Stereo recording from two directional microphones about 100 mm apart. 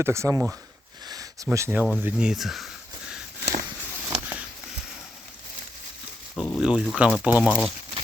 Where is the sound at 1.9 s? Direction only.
20° right (ahead or behind).